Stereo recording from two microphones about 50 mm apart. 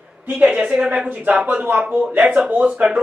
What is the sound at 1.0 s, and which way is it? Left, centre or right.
A man's voice, right.